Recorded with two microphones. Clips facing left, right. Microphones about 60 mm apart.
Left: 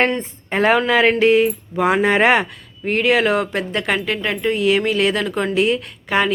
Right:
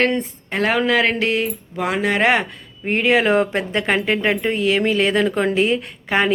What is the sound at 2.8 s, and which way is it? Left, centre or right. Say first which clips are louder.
Speech: even; centre.